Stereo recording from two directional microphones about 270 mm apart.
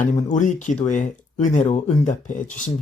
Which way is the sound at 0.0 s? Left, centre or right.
Left.